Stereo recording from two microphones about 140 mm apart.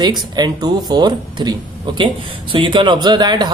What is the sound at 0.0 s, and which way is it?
Speech, 30° right (ahead or behind).